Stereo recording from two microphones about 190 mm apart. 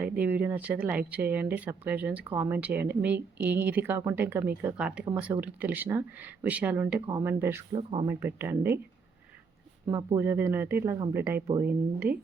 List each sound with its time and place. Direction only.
0.0 s speech: 10° right (ahead or behind)
7.7 s speech: 30° right (ahead or behind)
8.0 s speech: 10° right (ahead or behind)
9.9 s speech: 15° right (ahead or behind)